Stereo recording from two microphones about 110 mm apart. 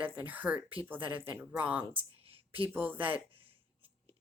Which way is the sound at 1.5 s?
10° right (ahead or behind).